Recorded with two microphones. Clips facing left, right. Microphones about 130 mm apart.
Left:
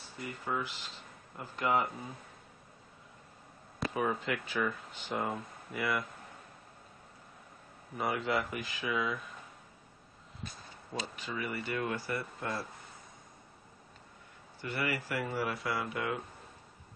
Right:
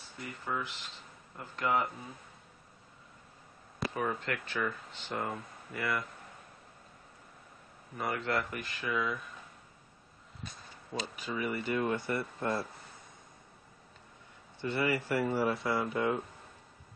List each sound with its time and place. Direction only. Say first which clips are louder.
0.5 s speech: left 1 dB; centre (ahead or behind)
3.8 s speech: left 1 dB; 5° left (ahead or behind)
8.0 s speech: left 1 dB; 5° left (ahead or behind)
10.4 s a sound: left 1 dB; centre (ahead or behind)
11.1 s speech: right 5 dB; 15° right (ahead or behind)
14.6 s speech: right 4 dB; 25° right (ahead or behind)